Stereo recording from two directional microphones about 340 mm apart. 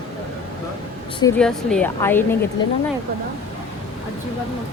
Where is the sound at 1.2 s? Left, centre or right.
Centre.